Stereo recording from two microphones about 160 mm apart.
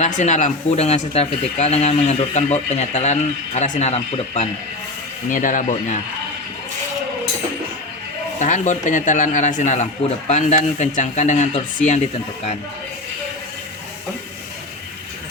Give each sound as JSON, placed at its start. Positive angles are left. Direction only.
{"t": 0.0, "sound": "speech", "side_deg": 45}
{"t": 5.3, "sound": "speech", "side_deg": 55}
{"t": 8.4, "sound": "speech", "side_deg": 50}